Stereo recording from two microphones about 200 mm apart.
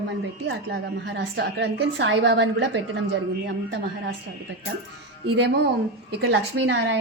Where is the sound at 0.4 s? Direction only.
55° right (ahead or behind).